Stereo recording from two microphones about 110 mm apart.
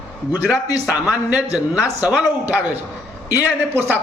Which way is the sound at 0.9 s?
5° right (ahead or behind).